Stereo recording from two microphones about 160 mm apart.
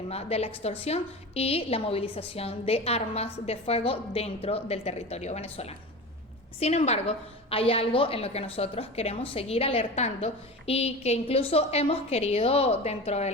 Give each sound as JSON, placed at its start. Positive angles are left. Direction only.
{"t": 0.1, "sound": "a woman's voice", "side_deg": 40}